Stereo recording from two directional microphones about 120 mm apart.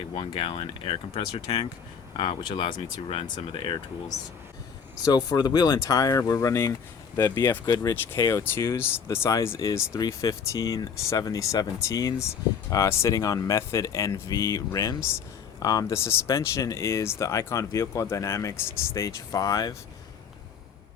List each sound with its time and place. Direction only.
0.1 s speech: 40° left (ahead or behind)
5.0 s speech: 35° left (ahead or behind)